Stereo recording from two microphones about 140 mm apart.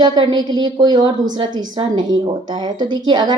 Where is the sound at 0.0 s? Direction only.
30° right (ahead or behind).